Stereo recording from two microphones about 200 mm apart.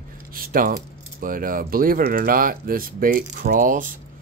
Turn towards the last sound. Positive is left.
turn(degrees=-45)  # may be behind; listen again after turning